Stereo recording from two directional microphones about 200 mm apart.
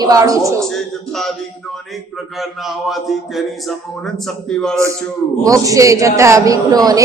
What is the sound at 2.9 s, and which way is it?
Speech, centre (ahead or behind).